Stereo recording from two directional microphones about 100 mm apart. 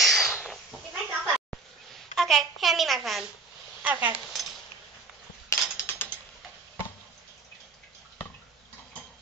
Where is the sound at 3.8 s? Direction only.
20° right (ahead or behind).